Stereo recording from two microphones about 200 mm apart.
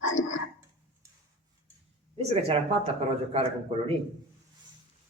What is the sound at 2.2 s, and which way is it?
A man's voice, 30° right (ahead or behind).